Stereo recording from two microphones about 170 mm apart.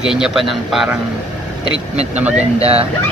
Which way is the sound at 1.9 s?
40° right (ahead or behind).